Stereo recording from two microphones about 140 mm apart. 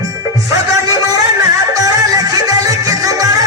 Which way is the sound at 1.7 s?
25° right (ahead or behind).